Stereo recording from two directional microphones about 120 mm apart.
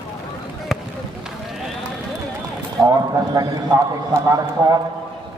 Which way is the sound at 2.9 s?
25° right (ahead or behind).